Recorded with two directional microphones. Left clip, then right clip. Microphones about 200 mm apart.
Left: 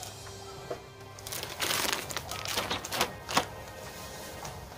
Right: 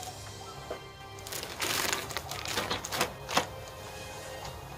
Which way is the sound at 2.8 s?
15° left (ahead or behind).